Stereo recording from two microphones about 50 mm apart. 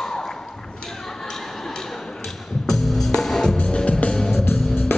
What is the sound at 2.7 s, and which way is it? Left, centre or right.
Music, centre.